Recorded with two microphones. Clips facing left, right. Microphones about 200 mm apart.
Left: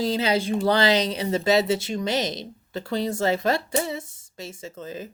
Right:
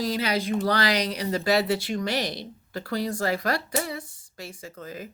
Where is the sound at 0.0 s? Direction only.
25° left (ahead or behind).